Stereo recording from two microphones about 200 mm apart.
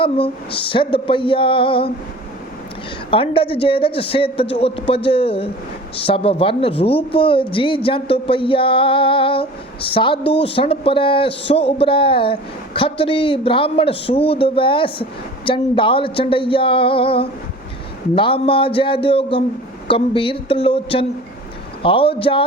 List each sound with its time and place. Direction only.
0.0 s a woman's voice: 25° left (ahead or behind)
3.1 s a woman's voice: 25° left (ahead or behind)